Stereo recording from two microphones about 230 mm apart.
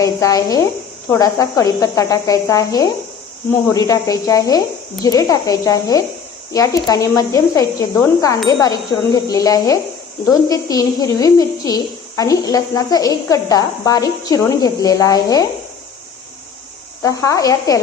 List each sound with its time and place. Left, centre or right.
0.0 s a woman's voice: centre
17.0 s a woman's voice: centre